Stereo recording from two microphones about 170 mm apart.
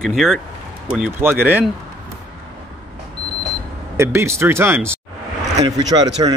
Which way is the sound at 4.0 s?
15° right (ahead or behind).